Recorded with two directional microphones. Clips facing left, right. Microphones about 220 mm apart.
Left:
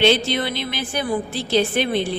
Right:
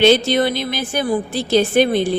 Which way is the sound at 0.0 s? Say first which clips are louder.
Right 5 dB; 45° right (ahead or behind).